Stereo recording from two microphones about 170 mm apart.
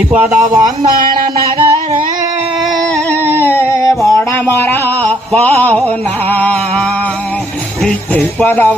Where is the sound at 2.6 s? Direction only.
Centre (ahead or behind).